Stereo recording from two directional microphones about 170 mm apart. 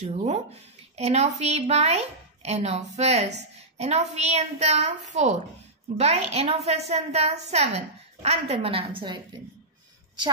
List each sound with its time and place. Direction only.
0.0 s a woman's voice: 40° right (ahead or behind)